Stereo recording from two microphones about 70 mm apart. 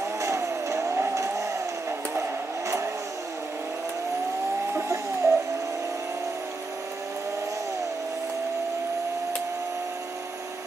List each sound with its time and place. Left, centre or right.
0.2 s vehicle: right
4.7 s bird: right